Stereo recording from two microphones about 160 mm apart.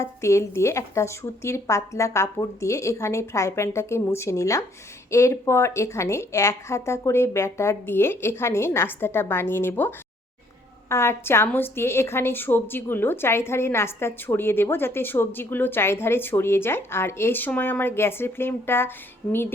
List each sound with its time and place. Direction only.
0.0 s a woman's voice: 20° left (ahead or behind)